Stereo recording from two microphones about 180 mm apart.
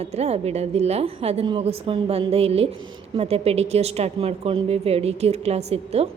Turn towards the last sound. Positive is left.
turn(degrees=-35)  # may be behind; listen again after turning